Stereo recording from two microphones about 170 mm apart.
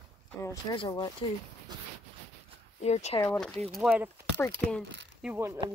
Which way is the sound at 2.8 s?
40° left (ahead or behind).